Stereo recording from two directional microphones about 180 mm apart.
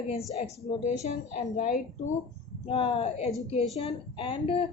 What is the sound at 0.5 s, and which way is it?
Speech, 15° left (ahead or behind).